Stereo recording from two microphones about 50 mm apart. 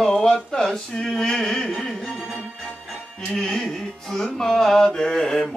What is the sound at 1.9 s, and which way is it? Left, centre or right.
Music, centre.